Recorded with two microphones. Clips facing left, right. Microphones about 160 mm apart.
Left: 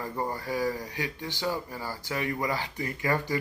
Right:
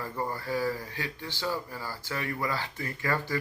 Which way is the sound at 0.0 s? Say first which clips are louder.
Left 1 dB; 15° left (ahead or behind).